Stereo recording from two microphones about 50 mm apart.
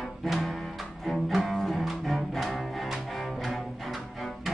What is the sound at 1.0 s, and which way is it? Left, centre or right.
Music, centre.